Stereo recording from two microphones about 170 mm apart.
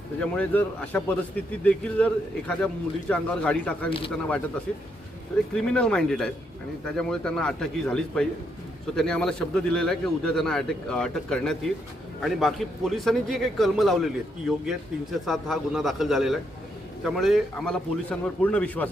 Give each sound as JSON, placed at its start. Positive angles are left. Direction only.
{"t": 0.2, "sound": "a man's voice", "side_deg": 5}
{"t": 3.8, "sound": "speech", "side_deg": 30}
{"t": 5.5, "sound": "speech", "side_deg": 5}